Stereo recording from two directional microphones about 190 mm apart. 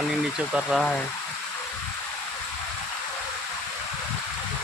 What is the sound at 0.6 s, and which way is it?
Speech, centre (ahead or behind).